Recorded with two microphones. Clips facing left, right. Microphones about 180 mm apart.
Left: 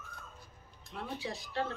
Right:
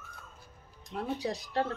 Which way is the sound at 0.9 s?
40° right (ahead or behind).